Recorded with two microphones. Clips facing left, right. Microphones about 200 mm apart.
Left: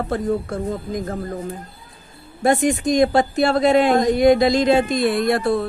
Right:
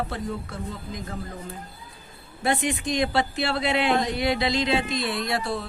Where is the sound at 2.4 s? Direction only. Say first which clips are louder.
Left 8 dB; 45° left (ahead or behind).